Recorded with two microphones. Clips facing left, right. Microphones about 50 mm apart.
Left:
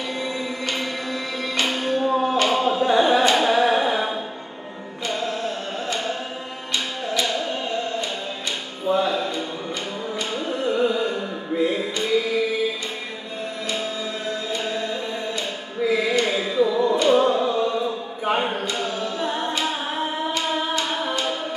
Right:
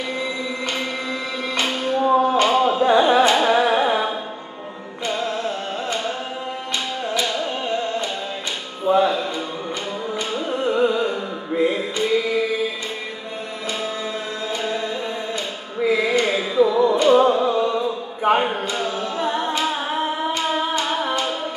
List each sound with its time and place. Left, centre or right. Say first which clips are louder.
1.9 s music: right 6 dB; right
2.3 s carnatic music: right 3 dB; right
5.0 s music: right 2 dB; right
8.8 s a sound: right 4 dB; right
10.1 s carnatic music: right 2 dB; centre
14.5 s music: right 4 dB; right
15.9 s music: right 2 dB; centre
16.2 s carnatic music: right 3 dB; right
16.8 s music: right 3 dB; right
17.1 s a sound: right 3 dB; centre
20.5 s music: right 2 dB; right